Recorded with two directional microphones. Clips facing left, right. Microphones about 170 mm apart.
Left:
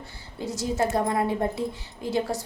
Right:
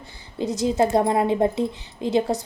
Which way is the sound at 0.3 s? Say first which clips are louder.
Right 6 dB; 20° right (ahead or behind).